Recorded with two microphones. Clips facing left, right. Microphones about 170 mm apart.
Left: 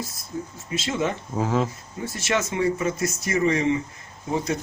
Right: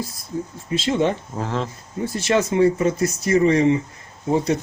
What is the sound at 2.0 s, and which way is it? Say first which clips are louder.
Speech: right 6 dB; 30° right (ahead or behind).